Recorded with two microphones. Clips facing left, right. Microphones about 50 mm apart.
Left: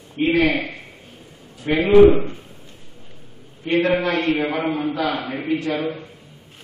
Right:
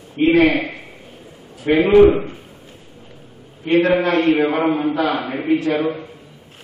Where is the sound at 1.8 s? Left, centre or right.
Centre.